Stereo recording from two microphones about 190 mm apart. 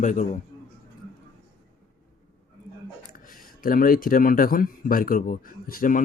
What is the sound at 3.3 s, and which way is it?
Speech, 45° left (ahead or behind).